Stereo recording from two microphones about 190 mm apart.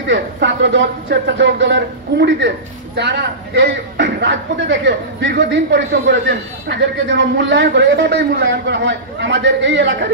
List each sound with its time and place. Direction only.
0.0 s a man's voice: 70° right (ahead or behind)